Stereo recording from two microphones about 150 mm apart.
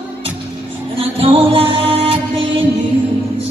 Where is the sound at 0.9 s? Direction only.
40° right (ahead or behind).